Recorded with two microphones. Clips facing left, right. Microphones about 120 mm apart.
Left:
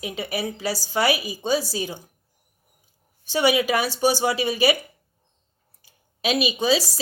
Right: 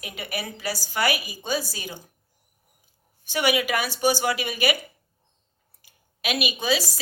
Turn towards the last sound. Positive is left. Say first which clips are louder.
# left 4 dB
turn(degrees=30)  # may be behind; listen again after turning